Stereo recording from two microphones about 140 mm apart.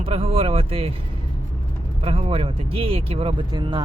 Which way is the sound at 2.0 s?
45° right (ahead or behind).